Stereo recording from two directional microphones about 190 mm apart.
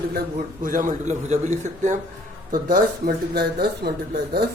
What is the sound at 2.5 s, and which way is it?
Speech, 50° right (ahead or behind).